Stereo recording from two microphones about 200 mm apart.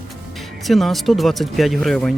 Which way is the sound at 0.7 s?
Centre (ahead or behind).